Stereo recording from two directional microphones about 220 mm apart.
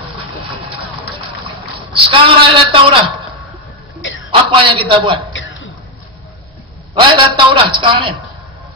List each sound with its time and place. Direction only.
2.0 s a man's voice: 25° right (ahead or behind)
4.3 s a man's voice: 25° right (ahead or behind)
6.9 s a man's voice: 25° right (ahead or behind)